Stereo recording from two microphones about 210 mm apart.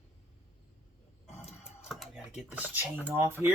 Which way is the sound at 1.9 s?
Centre (ahead or behind).